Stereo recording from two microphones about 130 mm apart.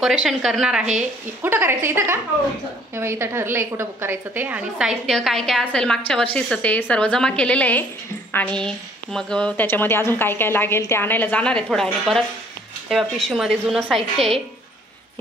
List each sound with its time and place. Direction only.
0.0 s a woman's voice: centre (ahead or behind)
1.4 s a woman's voice: 15° right (ahead or behind); by 14.4 s centre (ahead or behind)